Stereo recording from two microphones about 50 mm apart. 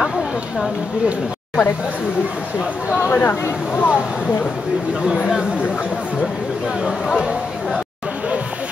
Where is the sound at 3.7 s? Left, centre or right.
Left.